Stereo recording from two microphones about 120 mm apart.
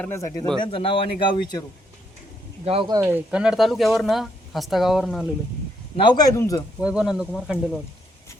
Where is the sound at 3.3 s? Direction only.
5° right (ahead or behind).